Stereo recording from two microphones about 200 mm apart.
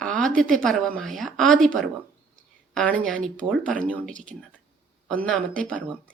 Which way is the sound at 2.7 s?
5° left (ahead or behind).